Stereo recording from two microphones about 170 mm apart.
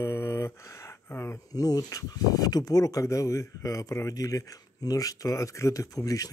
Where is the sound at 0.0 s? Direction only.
15° left (ahead or behind).